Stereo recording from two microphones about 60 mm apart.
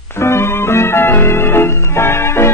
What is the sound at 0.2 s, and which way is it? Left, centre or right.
Music, left.